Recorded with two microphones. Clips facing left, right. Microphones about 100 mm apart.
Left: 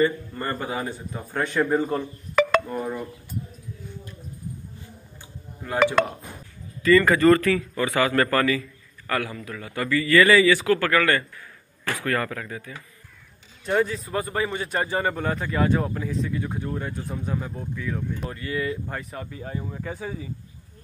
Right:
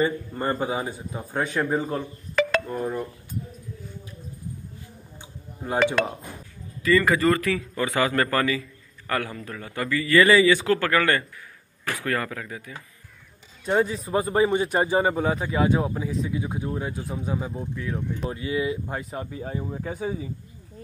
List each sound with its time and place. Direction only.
0.0 s a man's voice: 20° right (ahead or behind)
0.8 s a man's voice: 10° right (ahead or behind)
6.8 s speech: 10° right (ahead or behind)
7.5 s a man's voice: 20° right (ahead or behind); by 18.3 s 5° right (ahead or behind)
18.3 s speech: 15° right (ahead or behind)
19.0 s a man's voice: 25° right (ahead or behind)
19.4 s speech: 15° right (ahead or behind)